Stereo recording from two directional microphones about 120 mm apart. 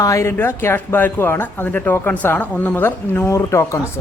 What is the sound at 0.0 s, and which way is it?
Speech, 25° left (ahead or behind).